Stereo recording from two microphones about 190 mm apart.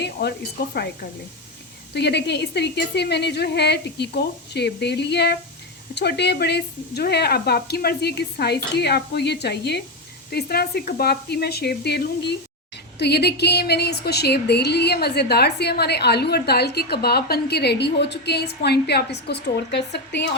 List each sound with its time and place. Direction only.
0.0 s speech: 55° left (ahead or behind)
1.9 s a woman's voice: 60° left (ahead or behind)